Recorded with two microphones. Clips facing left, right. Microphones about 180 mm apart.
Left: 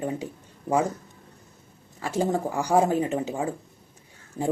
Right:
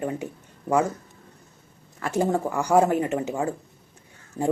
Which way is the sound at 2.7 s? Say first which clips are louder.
Right 2 dB; 65° right (ahead or behind).